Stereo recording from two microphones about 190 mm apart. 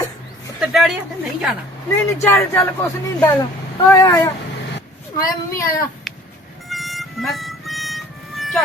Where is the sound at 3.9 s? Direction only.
15° left (ahead or behind).